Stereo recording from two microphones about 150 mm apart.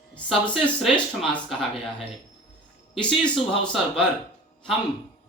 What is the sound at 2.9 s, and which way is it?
Speech, 5° left (ahead or behind).